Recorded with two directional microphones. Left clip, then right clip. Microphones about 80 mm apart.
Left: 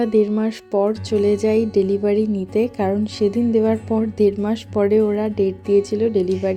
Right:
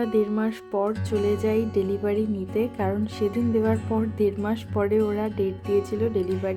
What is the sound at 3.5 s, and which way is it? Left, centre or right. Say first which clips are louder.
Speech: left 6 dB; left.